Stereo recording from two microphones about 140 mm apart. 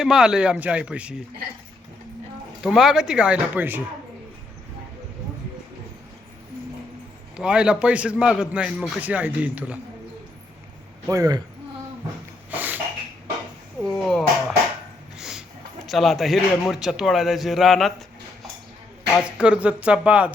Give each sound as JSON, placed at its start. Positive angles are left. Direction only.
{"t": 0.0, "sound": "a man's voice", "side_deg": -5}
{"t": 2.6, "sound": "a man's voice", "side_deg": -5}
{"t": 7.3, "sound": "a man's voice", "side_deg": -5}
{"t": 11.1, "sound": "speech", "side_deg": -25}
{"t": 12.5, "sound": "a sound", "side_deg": -10}
{"t": 13.9, "sound": "a man's voice", "side_deg": 5}
{"t": 15.2, "sound": "a sound", "side_deg": -5}
{"t": 15.9, "sound": "a man's voice", "side_deg": 0}
{"t": 19.2, "sound": "a man's voice", "side_deg": -5}